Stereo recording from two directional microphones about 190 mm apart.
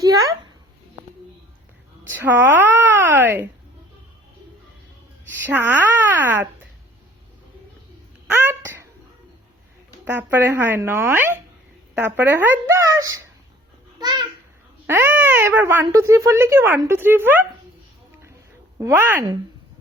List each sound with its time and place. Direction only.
0.0 s a sound: 20° right (ahead or behind)
2.1 s speech: 10° right (ahead or behind)
5.5 s speech: 10° right (ahead or behind)
8.3 s babbling: 10° right (ahead or behind)
10.1 s speech: 10° right (ahead or behind)
14.0 s babbling: 20° right (ahead or behind)
14.8 s speech: 10° right (ahead or behind)
18.8 s speech: 15° right (ahead or behind)